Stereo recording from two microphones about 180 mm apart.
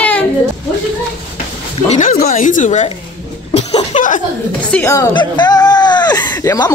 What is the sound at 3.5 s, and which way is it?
Cough, 35° left (ahead or behind).